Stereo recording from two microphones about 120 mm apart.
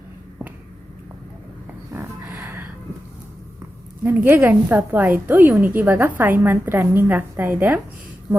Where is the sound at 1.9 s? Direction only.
20° right (ahead or behind).